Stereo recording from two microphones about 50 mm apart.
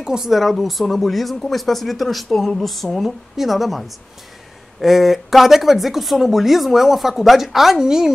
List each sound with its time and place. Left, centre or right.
0.0 s a woman's voice: centre